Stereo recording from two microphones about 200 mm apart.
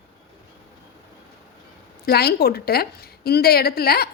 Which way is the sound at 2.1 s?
50° left (ahead or behind).